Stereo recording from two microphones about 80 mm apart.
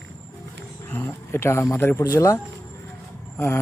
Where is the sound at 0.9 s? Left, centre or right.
Left.